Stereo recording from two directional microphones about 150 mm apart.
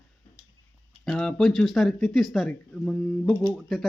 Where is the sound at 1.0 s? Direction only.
5° left (ahead or behind).